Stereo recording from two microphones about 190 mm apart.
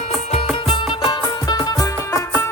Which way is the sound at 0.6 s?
25° left (ahead or behind).